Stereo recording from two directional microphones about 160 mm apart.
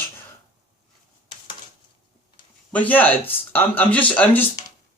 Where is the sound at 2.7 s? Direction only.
10° left (ahead or behind).